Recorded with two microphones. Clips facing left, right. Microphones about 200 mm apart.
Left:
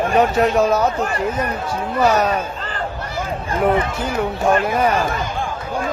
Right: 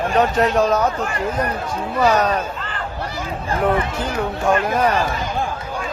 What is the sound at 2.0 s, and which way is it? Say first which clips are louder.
Speech: even; 10° left (ahead or behind).